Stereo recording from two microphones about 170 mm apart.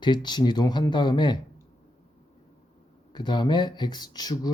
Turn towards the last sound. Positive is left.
turn(degrees=25)  # may be behind; listen again after turning